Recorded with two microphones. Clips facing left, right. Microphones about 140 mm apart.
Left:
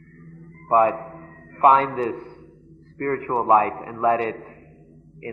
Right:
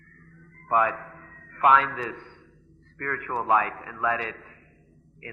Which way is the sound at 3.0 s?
35° left (ahead or behind).